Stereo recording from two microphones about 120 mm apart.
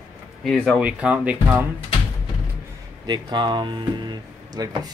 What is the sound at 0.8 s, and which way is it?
Speech, 10° right (ahead or behind).